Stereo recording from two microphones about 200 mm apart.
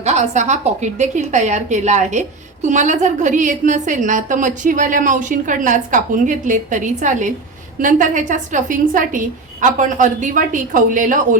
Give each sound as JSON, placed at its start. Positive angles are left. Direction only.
{"t": 0.0, "sound": "a woman's voice", "side_deg": -35}